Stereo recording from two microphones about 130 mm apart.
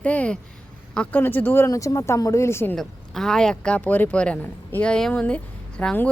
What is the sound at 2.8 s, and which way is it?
Speech, 5° left (ahead or behind).